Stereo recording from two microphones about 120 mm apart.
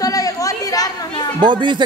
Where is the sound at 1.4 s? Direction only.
40° right (ahead or behind).